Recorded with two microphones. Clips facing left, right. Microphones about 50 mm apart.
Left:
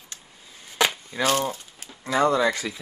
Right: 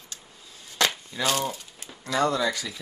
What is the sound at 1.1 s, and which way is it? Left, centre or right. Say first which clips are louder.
Splinter: left 3 dB; left.